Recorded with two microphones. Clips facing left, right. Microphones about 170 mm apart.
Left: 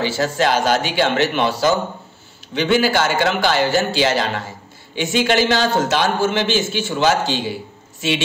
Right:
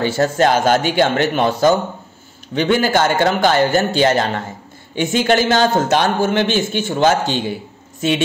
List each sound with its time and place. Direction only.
0.0 s a man's voice: 55° right (ahead or behind)